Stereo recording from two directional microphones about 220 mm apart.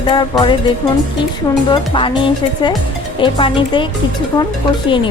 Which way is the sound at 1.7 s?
25° left (ahead or behind).